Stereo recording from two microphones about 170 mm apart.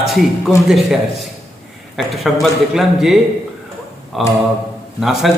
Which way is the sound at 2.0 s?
Centre (ahead or behind).